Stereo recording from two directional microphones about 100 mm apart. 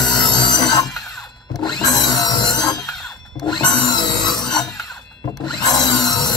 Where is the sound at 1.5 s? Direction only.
40° left (ahead or behind).